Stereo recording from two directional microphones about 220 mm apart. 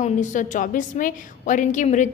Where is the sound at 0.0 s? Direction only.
35° left (ahead or behind).